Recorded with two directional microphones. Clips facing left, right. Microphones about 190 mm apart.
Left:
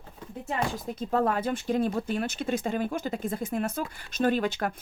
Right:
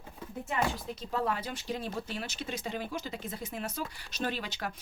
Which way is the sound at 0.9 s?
50° left (ahead or behind).